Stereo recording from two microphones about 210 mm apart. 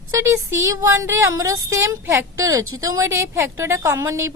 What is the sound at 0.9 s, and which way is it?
Speech, 15° right (ahead or behind).